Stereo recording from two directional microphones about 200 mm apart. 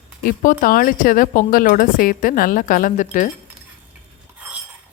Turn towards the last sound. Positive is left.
turn(degrees=40)  # may be behind; listen again after turning